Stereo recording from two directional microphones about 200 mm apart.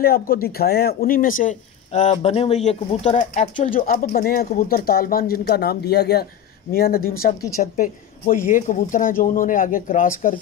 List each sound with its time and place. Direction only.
0.0 s speech: 50° left (ahead or behind)